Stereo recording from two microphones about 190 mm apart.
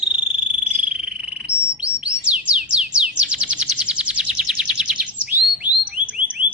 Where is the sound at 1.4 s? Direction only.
5° right (ahead or behind).